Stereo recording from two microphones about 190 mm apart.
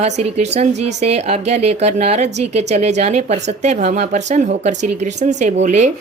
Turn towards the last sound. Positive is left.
turn(degrees=-40)  # may be behind; listen again after turning